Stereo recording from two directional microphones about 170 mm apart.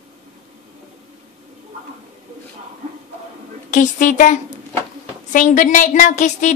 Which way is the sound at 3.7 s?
50° left (ahead or behind).